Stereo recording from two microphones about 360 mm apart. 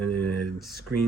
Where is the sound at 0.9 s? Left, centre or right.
Right.